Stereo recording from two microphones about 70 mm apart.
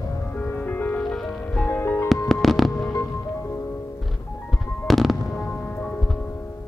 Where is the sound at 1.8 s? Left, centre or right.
Left.